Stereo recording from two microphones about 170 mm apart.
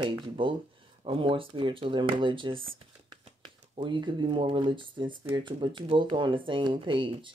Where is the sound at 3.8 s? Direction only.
30° right (ahead or behind).